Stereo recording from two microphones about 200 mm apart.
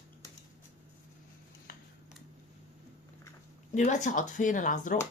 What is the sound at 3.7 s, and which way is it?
Speech, 35° left (ahead or behind).